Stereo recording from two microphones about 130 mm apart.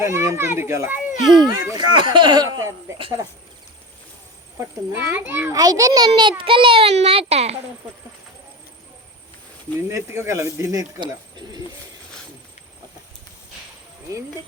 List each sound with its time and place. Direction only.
0.0 s speech: 20° right (ahead or behind)
0.9 s speech: centre (ahead or behind)
1.6 s speech: 35° right (ahead or behind)
4.9 s a child's voice: 20° right (ahead or behind)
5.5 s a child's voice: 25° right (ahead or behind); by 7.6 s 55° right (ahead or behind)
9.9 s speech: 25° right (ahead or behind)